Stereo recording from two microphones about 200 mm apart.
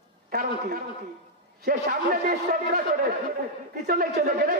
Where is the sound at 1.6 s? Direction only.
45° right (ahead or behind).